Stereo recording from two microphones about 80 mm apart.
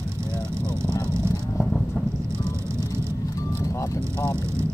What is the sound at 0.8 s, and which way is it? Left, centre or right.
Speech, right.